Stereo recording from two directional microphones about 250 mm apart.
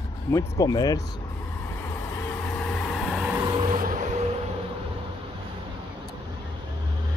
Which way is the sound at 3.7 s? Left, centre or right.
Right.